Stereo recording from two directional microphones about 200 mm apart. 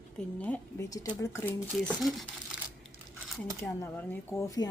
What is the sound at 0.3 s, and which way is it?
Speech, 10° left (ahead or behind).